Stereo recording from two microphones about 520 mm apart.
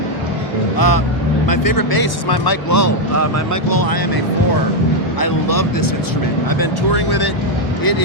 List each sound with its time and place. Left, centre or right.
0.8 s speech: left
5.2 s speech: left